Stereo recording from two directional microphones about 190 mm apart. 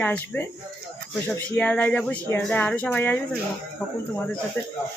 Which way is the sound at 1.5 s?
5° left (ahead or behind).